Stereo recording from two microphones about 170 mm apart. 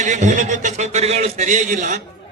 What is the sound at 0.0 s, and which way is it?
A man's voice, 45° right (ahead or behind).